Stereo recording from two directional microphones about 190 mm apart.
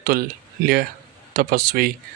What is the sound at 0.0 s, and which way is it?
A man's voice, 50° right (ahead or behind).